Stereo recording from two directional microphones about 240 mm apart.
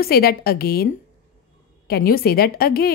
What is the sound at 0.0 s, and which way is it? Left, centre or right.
Speech, left.